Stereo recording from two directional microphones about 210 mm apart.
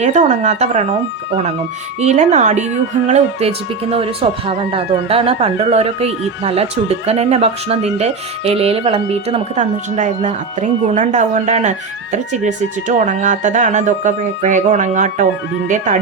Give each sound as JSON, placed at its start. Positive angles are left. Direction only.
{"t": 0.0, "sound": "speech", "side_deg": -35}
{"t": 2.0, "sound": "speech", "side_deg": -35}